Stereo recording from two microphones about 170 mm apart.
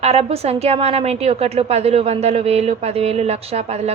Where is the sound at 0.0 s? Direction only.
35° right (ahead or behind).